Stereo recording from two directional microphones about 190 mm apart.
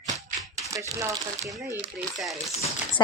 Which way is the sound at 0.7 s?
15° right (ahead or behind).